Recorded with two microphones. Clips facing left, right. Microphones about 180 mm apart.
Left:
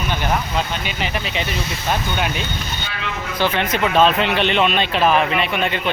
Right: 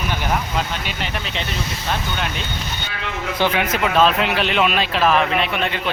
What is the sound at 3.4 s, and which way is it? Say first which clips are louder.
Speech: even; 15° right (ahead or behind).